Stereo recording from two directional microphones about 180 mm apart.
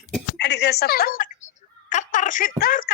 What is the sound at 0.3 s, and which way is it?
A woman's voice, 70° left (ahead or behind).